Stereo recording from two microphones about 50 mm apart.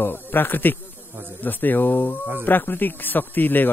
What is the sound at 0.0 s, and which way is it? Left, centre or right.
A man's voice, left.